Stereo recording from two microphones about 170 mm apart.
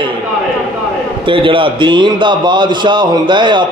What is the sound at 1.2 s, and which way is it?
A man's voice, 30° right (ahead or behind).